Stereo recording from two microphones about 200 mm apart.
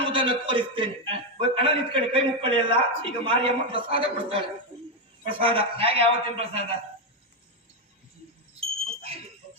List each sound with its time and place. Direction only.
0.0 s a man's voice: 25° right (ahead or behind)